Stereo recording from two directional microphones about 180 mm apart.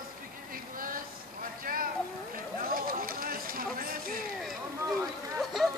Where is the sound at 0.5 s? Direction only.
50° right (ahead or behind).